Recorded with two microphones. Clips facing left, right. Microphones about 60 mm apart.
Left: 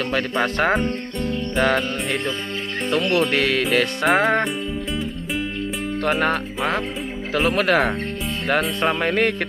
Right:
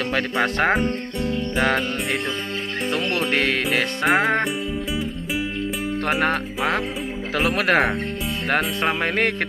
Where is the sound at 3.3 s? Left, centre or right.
Right.